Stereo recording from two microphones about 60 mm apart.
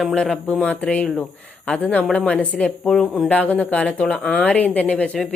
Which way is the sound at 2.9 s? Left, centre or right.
Centre.